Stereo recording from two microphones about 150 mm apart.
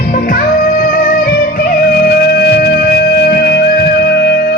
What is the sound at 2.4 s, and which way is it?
Music, 90° left.